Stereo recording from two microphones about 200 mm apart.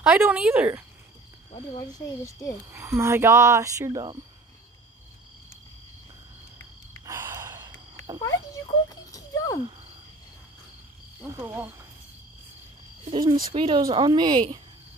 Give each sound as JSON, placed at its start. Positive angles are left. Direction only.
{"t": 0.0, "sound": "speech", "side_deg": -5}
{"t": 1.8, "sound": "speech", "side_deg": 15}
{"t": 2.7, "sound": "speech", "side_deg": -15}
{"t": 7.1, "sound": "gasp", "side_deg": -10}
{"t": 9.1, "sound": "a sound", "side_deg": 15}
{"t": 11.1, "sound": "speech", "side_deg": -10}
{"t": 13.0, "sound": "speech", "side_deg": -25}